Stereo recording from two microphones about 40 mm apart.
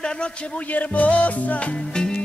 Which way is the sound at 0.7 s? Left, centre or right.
Left.